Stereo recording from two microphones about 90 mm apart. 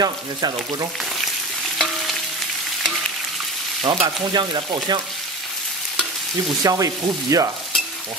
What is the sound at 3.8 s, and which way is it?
Frying, 70° right (ahead or behind).